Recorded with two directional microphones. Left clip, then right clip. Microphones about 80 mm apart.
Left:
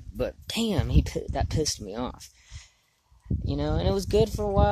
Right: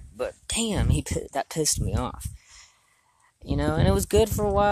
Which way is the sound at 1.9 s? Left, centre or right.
Left.